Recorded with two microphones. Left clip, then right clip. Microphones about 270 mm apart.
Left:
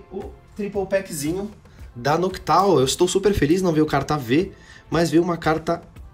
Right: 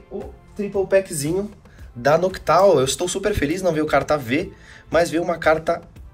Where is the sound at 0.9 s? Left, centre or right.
Centre.